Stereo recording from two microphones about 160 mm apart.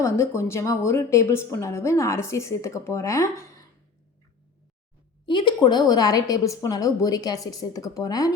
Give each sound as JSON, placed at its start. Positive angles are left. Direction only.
{"t": 0.0, "sound": "a woman's voice", "side_deg": 15}
{"t": 5.2, "sound": "a woman's voice", "side_deg": 30}